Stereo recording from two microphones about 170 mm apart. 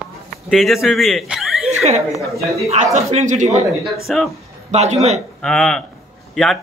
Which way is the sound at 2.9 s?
40° right (ahead or behind).